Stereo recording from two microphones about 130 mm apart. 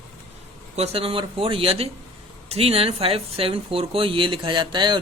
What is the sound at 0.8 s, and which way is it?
Speech, 50° right (ahead or behind).